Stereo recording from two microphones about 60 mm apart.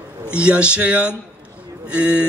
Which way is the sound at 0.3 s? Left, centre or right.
Centre.